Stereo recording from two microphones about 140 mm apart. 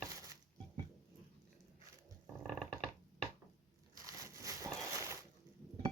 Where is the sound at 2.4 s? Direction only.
5° left (ahead or behind).